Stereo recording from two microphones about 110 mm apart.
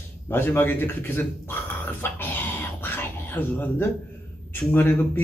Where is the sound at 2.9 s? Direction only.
20° left (ahead or behind).